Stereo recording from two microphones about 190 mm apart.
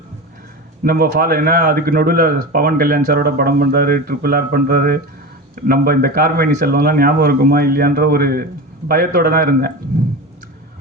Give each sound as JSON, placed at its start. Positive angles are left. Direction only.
{"t": 0.9, "sound": "speech", "side_deg": -50}